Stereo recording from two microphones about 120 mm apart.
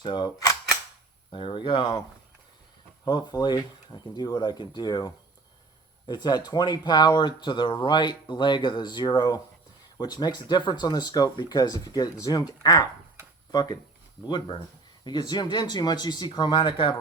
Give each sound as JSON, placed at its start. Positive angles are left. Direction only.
{"t": 0.0, "sound": "cap gun", "side_deg": 40}
{"t": 1.3, "sound": "speech", "side_deg": 40}